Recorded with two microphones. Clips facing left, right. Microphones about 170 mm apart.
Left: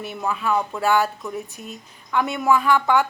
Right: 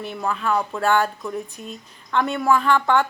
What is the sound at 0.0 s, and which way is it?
A woman's voice, 10° left (ahead or behind).